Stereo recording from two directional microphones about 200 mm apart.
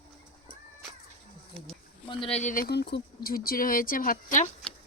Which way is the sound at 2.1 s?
25° left (ahead or behind).